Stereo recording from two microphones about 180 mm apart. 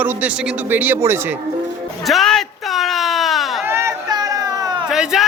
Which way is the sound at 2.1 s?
Centre (ahead or behind).